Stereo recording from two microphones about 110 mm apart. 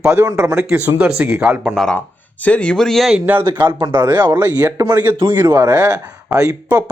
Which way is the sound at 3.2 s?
20° right (ahead or behind).